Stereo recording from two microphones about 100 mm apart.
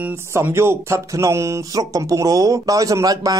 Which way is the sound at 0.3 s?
25° right (ahead or behind).